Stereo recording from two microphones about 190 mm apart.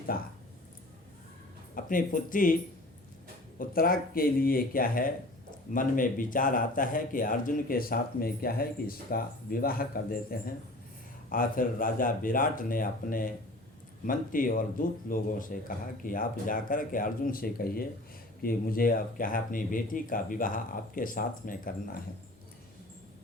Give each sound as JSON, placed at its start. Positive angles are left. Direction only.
{"t": 0.1, "sound": "speech", "side_deg": 50}
{"t": 1.7, "sound": "speech", "side_deg": 45}
{"t": 3.6, "sound": "speech", "side_deg": 50}